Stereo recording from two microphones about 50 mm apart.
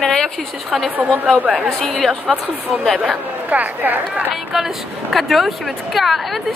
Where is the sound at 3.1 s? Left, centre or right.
Right.